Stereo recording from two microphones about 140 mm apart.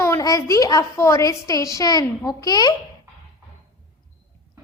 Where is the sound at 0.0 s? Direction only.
20° left (ahead or behind).